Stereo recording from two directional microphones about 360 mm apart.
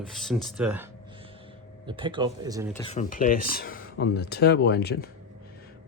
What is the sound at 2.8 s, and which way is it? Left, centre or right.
Speech, centre.